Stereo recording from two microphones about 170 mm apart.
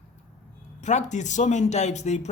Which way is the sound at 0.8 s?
45° left (ahead or behind).